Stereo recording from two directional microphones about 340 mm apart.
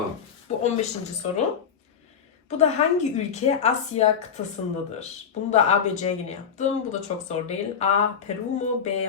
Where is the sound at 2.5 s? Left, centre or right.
Centre.